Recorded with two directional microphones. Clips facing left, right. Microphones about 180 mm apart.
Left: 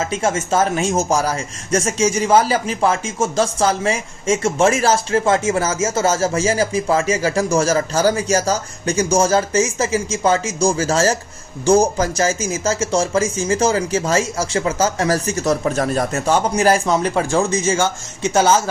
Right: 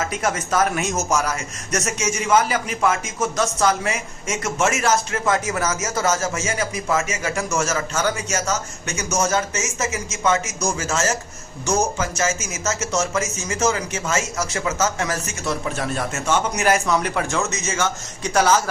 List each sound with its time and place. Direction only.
0.0 s speech: 25° left (ahead or behind)